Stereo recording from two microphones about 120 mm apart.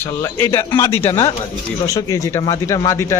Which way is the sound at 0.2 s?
20° left (ahead or behind).